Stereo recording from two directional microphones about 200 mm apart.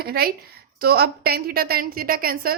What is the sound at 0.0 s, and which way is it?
A woman's voice, 50° right (ahead or behind).